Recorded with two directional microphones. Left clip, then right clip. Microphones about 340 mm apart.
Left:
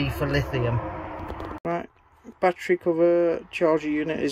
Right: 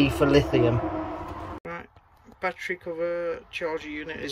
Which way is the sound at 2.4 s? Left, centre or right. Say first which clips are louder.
Left 7 dB; centre.